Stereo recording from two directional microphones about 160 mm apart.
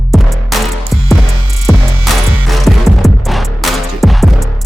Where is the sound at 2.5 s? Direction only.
Centre (ahead or behind).